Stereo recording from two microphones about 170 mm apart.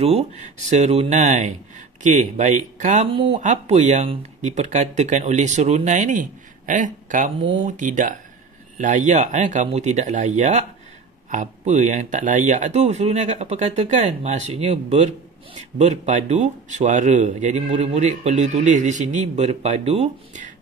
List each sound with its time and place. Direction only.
0.0 s speech: 40° right (ahead or behind)